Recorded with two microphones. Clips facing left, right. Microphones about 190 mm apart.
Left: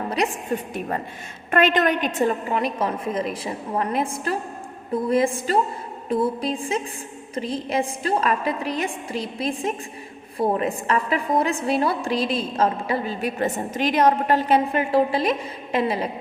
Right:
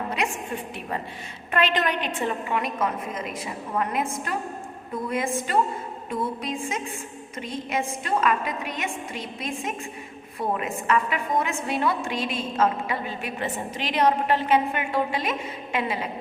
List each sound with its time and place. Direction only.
0.2 s a woman's voice: 35° left (ahead or behind)
0.7 s a woman's voice: 50° left (ahead or behind)